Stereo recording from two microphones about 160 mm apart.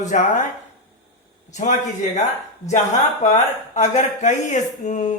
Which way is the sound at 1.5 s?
50° left (ahead or behind).